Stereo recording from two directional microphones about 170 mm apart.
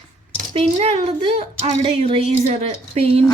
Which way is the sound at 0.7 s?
35° right (ahead or behind).